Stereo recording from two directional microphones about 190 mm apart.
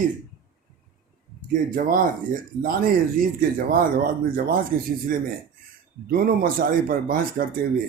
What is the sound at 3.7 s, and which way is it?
Speech, 50° right (ahead or behind).